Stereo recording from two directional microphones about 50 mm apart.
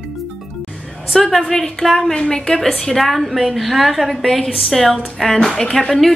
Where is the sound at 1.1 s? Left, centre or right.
Centre.